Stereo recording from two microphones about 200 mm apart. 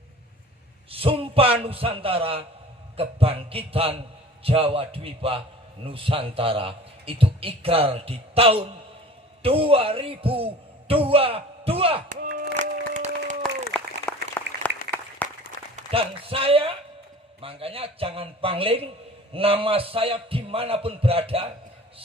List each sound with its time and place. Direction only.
0.9 s a man's voice: 30° right (ahead or behind)
12.2 s a sound: 40° right (ahead or behind)
14.1 s applause: 5° left (ahead or behind)
15.7 s a man's voice: 30° right (ahead or behind)